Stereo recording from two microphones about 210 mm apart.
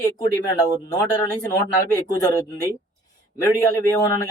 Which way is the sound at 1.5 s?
15° left (ahead or behind).